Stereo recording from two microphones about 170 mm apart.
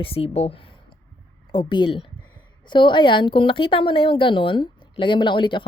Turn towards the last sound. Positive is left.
turn(degrees=30)  # may be behind; listen again after turning